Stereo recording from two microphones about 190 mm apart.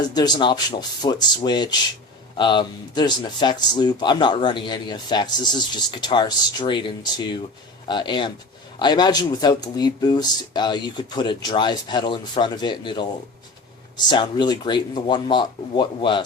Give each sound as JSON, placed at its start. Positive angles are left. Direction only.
{"t": 0.1, "sound": "speech", "side_deg": 20}